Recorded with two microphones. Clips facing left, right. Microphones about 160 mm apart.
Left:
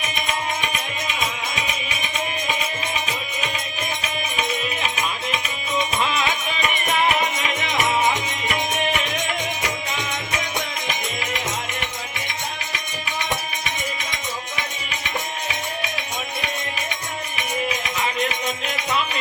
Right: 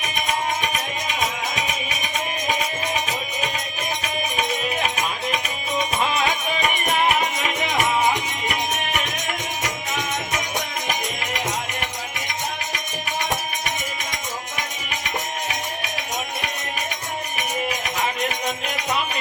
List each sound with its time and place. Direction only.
4.4 s music: 40° right (ahead or behind)